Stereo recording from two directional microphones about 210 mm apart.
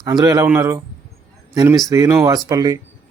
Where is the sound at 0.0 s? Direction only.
20° right (ahead or behind).